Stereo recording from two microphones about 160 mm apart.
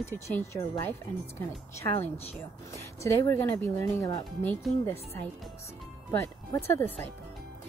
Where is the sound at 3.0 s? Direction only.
15° left (ahead or behind).